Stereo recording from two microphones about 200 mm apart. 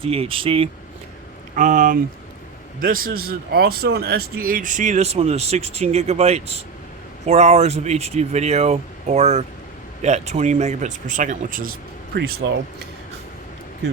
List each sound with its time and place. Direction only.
0.0 s speech: 30° right (ahead or behind)
1.5 s speech: 40° right (ahead or behind)
12.1 s speech: 50° right (ahead or behind)